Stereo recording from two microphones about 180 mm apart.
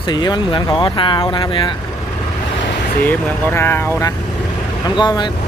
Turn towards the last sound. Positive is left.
turn(degrees=25)  # may be behind; listen again after turning